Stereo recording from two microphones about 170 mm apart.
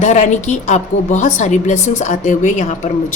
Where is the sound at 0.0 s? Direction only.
45° left (ahead or behind).